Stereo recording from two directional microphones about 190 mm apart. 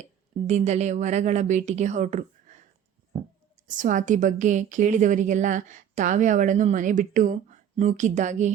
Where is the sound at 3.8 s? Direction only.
40° right (ahead or behind).